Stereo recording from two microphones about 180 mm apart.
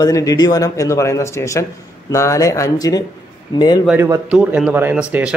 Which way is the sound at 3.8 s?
15° right (ahead or behind).